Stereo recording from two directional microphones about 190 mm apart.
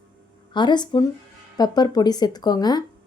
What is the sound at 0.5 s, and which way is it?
A woman's voice, 25° left (ahead or behind).